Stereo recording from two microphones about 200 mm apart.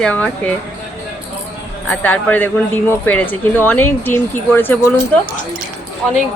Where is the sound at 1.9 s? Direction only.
10° left (ahead or behind).